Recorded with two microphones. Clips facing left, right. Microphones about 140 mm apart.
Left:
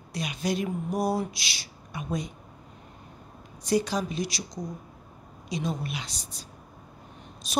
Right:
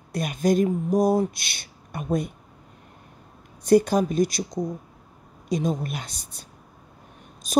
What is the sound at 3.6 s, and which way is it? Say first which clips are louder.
Speech: right 8 dB; 50° right (ahead or behind).